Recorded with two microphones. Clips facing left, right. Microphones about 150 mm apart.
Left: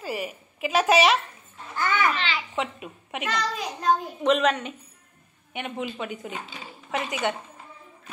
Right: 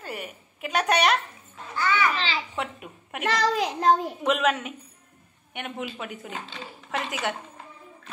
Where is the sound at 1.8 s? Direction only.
50° left (ahead or behind).